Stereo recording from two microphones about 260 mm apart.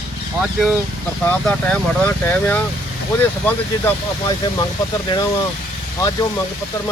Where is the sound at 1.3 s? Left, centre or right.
Centre.